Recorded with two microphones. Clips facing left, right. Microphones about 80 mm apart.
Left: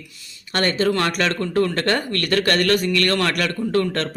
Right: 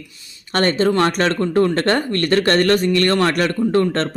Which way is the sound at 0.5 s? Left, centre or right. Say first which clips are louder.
Right 3 dB; right.